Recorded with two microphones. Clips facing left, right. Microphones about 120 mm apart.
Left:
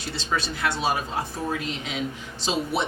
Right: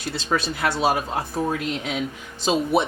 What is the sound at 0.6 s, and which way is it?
Speech, 55° right (ahead or behind).